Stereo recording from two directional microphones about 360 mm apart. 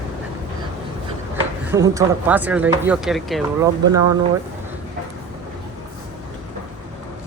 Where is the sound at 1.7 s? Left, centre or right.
Centre.